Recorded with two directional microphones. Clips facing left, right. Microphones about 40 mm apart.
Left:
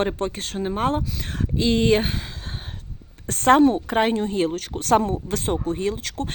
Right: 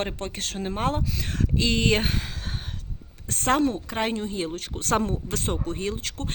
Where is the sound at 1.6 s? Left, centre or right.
Left.